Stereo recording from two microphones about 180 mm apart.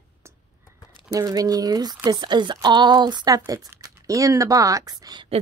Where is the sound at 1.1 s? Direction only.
20° right (ahead or behind).